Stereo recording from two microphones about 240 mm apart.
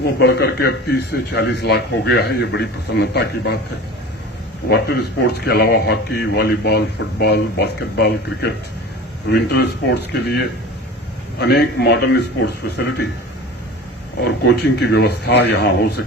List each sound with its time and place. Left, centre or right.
0.2 s speech: left
4.7 s speech: left
14.2 s speech: left